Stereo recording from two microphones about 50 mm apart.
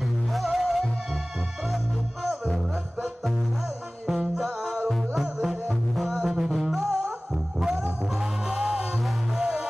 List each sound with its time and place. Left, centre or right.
0.3 s music: centre
2.2 s music: centre
4.1 s music: centre
8.2 s music: centre